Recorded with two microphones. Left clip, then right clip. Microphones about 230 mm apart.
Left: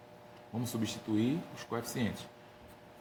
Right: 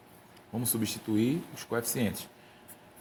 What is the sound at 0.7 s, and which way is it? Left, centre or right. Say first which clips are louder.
Speech: right 3 dB; right.